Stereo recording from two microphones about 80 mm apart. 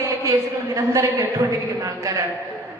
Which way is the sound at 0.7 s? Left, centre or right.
Right.